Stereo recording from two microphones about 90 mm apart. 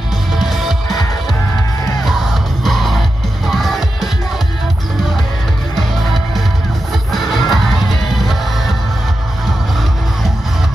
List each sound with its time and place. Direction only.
0.4 s music: centre (ahead or behind)
2.0 s music: centre (ahead or behind)
5.8 s music: centre (ahead or behind)